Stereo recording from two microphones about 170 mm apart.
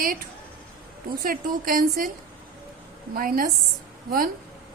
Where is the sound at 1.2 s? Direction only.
55° right (ahead or behind).